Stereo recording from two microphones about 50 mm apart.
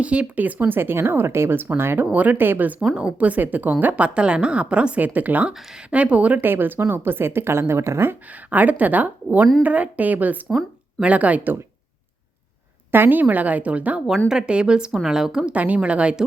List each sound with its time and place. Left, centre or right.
0.0 s a woman's voice: right
0.7 s a woman's voice: right
2.1 s speech: right
2.9 s a woman's voice: right
4.9 s a woman's voice: right
6.4 s a woman's voice: right
8.3 s a woman's voice: right
12.9 s speech: right
13.2 s a woman's voice: right
14.3 s a woman's voice: centre
15.5 s a woman's voice: right